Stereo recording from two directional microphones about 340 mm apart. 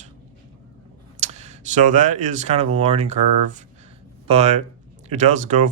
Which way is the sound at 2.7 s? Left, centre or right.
Centre.